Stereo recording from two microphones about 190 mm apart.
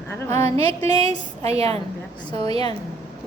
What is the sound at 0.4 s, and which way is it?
A woman's voice, 30° right (ahead or behind).